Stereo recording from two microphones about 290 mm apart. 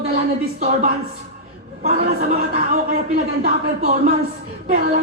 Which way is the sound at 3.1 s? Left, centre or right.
Right.